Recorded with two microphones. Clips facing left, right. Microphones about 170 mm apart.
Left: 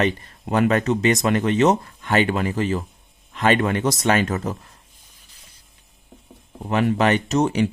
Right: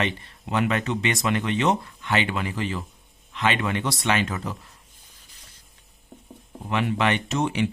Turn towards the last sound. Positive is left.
turn(degrees=40)  # may be behind; listen again after turning